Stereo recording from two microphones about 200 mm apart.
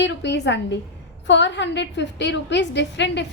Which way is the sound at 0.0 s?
60° left (ahead or behind).